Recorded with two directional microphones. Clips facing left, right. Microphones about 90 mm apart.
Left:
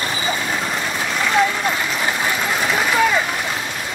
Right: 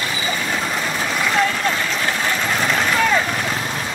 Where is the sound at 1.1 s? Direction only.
Centre (ahead or behind).